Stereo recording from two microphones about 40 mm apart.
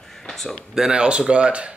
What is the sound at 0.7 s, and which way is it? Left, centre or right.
Speech, centre.